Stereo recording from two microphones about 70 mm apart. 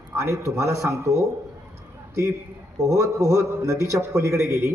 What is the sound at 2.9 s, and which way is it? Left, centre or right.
A man's voice, right.